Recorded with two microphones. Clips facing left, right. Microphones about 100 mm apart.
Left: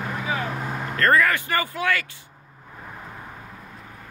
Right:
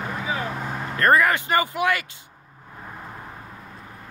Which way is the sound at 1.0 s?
20° right (ahead or behind).